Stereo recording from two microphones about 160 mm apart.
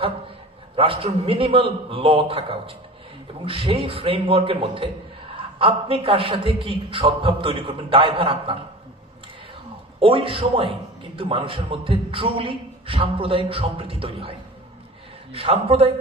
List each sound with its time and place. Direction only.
0.8 s a man's voice: 35° right (ahead or behind)
10.0 s a man's voice: 35° right (ahead or behind)